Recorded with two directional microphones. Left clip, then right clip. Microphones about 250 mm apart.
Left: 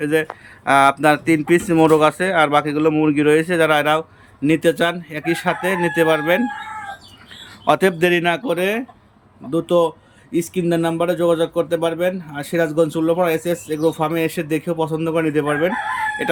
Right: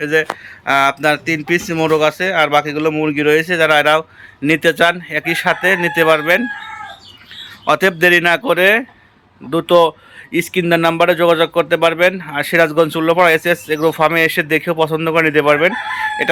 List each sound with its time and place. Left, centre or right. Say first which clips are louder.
0.0 s speech: right 4 dB; centre
7.6 s speech: right 3 dB; centre